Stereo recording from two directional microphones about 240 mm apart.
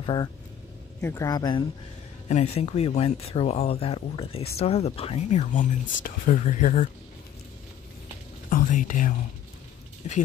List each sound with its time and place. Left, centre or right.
0.0 s speech: centre
8.5 s speech: left